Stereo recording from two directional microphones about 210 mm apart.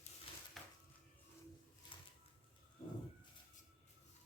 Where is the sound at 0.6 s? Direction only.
Centre (ahead or behind).